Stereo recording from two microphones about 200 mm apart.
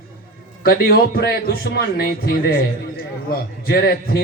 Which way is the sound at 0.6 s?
50° left (ahead or behind).